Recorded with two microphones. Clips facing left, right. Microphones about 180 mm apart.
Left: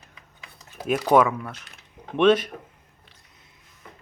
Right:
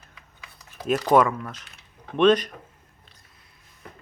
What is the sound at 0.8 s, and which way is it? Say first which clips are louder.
Speech: even; 10° left (ahead or behind).